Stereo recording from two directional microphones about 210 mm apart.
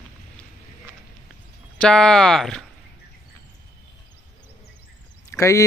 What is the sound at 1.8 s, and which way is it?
Speech, 5° left (ahead or behind).